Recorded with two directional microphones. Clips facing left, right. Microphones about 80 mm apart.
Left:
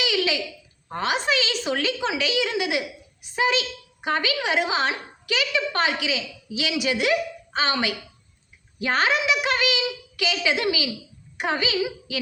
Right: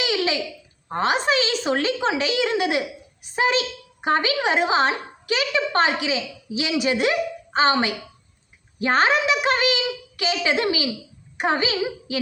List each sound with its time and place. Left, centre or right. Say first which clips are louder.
0.0 s babbling: right 1 dB; right
0.9 s a woman's voice: right 3 dB; right